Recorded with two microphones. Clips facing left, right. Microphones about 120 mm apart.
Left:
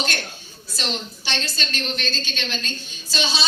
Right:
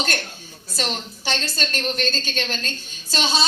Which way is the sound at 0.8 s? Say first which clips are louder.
Right 1 dB; 45° right (ahead or behind).